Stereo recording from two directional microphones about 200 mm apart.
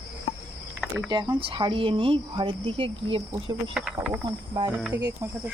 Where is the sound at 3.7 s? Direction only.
Centre (ahead or behind).